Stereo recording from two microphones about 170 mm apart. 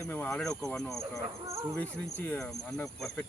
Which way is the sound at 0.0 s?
5° left (ahead or behind).